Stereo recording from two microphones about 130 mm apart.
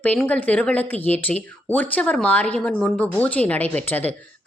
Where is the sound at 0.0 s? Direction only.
10° left (ahead or behind).